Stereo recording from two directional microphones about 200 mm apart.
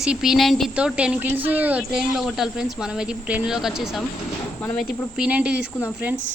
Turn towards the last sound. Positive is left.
turn(degrees=-10)  # may be behind; listen again after turning